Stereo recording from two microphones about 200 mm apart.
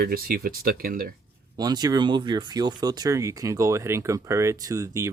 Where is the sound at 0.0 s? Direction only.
50° right (ahead or behind).